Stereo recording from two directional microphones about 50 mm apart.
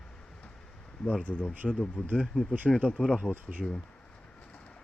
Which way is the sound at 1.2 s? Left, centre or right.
Left.